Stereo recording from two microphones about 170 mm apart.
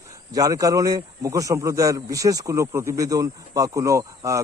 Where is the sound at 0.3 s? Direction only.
20° right (ahead or behind).